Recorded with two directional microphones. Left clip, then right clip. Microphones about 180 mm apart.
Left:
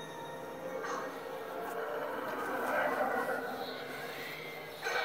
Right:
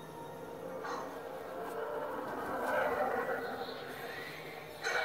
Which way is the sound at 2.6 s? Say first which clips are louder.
Even; 45° right (ahead or behind).